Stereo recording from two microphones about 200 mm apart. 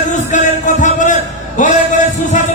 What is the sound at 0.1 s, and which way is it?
Music, 40° left (ahead or behind).